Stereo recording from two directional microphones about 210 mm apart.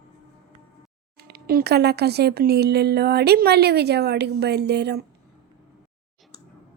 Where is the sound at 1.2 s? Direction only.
50° right (ahead or behind).